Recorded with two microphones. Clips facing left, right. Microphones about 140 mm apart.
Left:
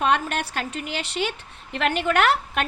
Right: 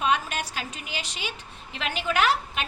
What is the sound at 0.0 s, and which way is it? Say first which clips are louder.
A woman's voice: left 3 dB; 60° left (ahead or behind).